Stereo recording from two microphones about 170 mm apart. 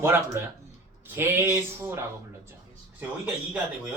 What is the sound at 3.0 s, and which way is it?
Speech, 10° right (ahead or behind).